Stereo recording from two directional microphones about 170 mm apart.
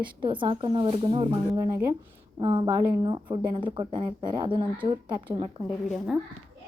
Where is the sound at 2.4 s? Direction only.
30° right (ahead or behind).